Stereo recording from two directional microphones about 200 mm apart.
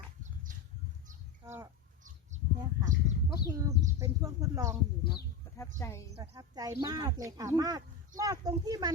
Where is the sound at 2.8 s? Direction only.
15° right (ahead or behind).